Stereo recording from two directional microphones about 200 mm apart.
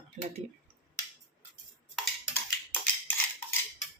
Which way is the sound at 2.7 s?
10° left (ahead or behind).